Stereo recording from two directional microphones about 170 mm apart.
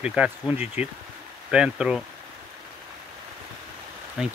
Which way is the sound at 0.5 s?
40° left (ahead or behind).